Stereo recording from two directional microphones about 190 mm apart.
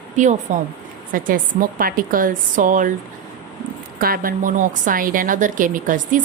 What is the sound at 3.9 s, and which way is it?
A woman's voice, 50° right (ahead or behind).